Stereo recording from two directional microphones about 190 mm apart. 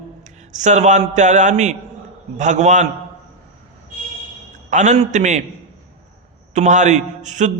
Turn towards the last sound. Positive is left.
turn(degrees=-40)  # may be behind; listen again after turning